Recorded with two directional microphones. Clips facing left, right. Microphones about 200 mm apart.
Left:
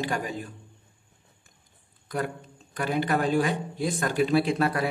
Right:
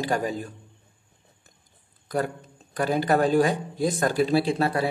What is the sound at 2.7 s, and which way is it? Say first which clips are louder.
A man's voice: right 4 dB; 40° right (ahead or behind).